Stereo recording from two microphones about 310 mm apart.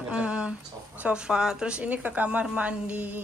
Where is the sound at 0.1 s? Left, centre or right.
Centre.